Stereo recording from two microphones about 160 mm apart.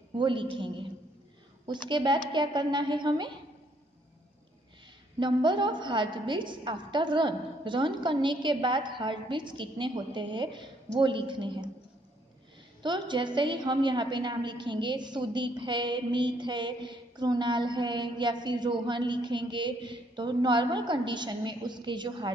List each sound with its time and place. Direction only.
0.1 s a woman's voice: 30° right (ahead or behind)
1.9 s a woman's voice: 30° right (ahead or behind)
5.2 s a woman's voice: 30° right (ahead or behind)
12.8 s a woman's voice: 30° right (ahead or behind)